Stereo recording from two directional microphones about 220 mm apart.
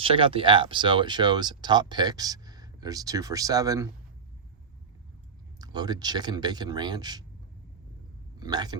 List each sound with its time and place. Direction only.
0.0 s speech: 25° right (ahead or behind)
5.5 s speech: 20° right (ahead or behind)
8.4 s speech: 20° right (ahead or behind)